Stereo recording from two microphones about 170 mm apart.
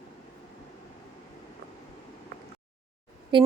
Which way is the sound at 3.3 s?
30° right (ahead or behind).